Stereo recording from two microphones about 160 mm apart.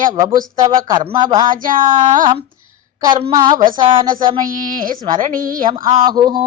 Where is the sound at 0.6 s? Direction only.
25° right (ahead or behind).